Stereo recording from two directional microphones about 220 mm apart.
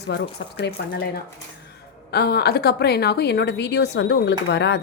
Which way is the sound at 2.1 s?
45° left (ahead or behind).